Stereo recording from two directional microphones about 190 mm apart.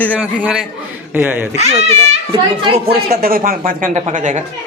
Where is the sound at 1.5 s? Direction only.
35° right (ahead or behind).